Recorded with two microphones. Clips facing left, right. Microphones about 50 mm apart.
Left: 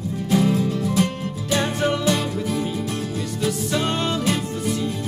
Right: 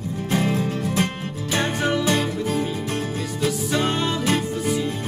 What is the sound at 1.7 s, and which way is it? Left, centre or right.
Music, centre.